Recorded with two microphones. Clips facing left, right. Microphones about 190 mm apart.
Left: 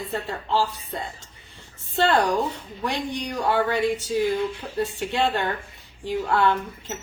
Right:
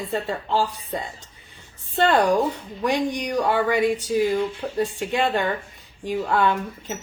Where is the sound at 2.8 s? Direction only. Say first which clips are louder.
Right 5 dB; 15° right (ahead or behind).